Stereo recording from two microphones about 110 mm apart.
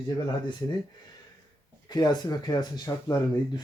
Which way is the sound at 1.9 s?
40° left (ahead or behind).